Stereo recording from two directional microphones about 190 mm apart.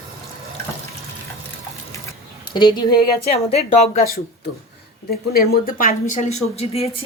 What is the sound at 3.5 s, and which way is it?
Speech, 35° left (ahead or behind).